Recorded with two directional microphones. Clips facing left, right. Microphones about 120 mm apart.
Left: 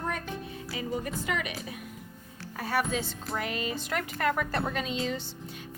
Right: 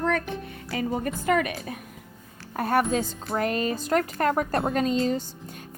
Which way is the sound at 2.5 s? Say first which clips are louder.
Right 6 dB; 50° right (ahead or behind).